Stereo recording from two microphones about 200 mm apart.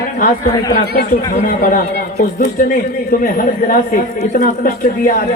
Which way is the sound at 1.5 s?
45° left (ahead or behind).